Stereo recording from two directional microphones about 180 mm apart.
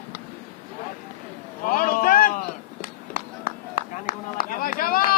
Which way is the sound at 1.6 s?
50° left (ahead or behind).